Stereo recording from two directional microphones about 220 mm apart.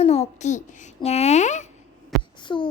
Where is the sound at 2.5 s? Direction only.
20° left (ahead or behind).